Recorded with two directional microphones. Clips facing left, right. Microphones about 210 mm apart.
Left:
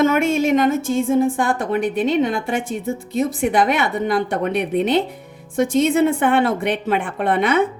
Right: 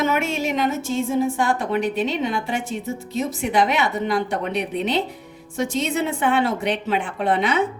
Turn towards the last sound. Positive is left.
turn(degrees=55)  # may be behind; listen again after turning